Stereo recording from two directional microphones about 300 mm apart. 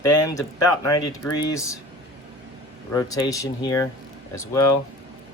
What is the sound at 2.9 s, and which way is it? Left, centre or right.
Speech, centre.